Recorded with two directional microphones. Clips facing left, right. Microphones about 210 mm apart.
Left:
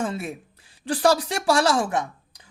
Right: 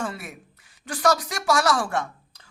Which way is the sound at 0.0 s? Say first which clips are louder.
Left 4 dB; 25° left (ahead or behind).